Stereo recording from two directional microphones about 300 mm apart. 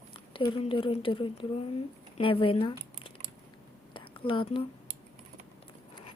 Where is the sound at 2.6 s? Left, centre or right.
Centre.